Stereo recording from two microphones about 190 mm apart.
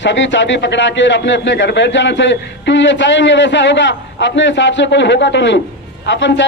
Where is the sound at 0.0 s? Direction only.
70° left (ahead or behind).